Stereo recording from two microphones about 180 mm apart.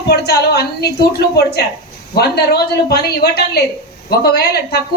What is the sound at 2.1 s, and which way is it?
A woman's voice, 65° left (ahead or behind).